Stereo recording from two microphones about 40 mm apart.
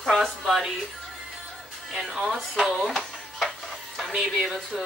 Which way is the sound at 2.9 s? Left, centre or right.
Centre.